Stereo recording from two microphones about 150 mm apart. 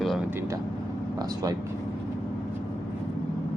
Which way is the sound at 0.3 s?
15° right (ahead or behind).